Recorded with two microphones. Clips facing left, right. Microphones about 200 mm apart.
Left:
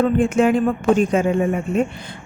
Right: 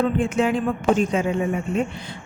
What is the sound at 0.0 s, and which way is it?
Speech, 50° left (ahead or behind).